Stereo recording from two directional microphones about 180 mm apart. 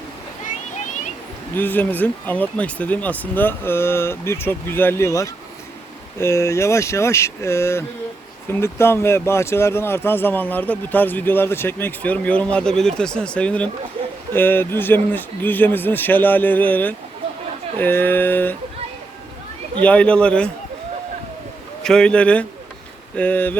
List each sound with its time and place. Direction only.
1.5 s speech: 10° left (ahead or behind)
19.8 s speech: 5° left (ahead or behind)
21.8 s speech: 5° left (ahead or behind)